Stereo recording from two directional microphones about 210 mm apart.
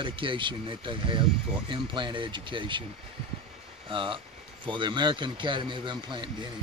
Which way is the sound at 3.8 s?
25° right (ahead or behind).